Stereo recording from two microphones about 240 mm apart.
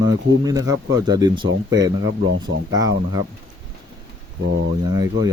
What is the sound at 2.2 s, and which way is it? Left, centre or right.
Speech, right.